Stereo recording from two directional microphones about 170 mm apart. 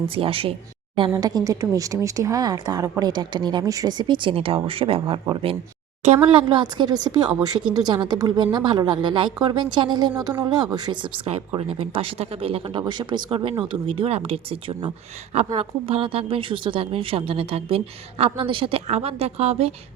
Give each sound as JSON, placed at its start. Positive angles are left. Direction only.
{"t": 0.1, "sound": "speech", "side_deg": -30}